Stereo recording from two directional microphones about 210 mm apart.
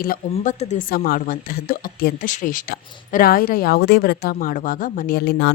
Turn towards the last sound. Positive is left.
turn(degrees=50)  # may be behind; listen again after turning